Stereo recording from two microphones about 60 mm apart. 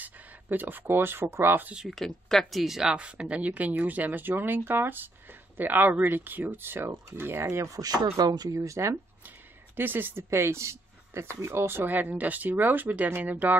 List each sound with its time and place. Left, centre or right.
0.0 s speech: right
1.9 s speech: centre; by 8.9 s right
9.8 s speech: right